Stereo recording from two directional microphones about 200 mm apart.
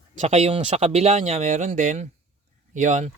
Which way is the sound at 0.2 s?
35° right (ahead or behind).